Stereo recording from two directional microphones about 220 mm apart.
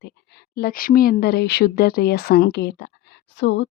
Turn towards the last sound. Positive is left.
turn(degrees=55)  # may be behind; listen again after turning